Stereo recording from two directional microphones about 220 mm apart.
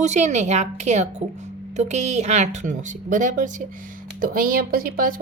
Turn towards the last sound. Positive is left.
turn(degrees=-40)  # may be behind; listen again after turning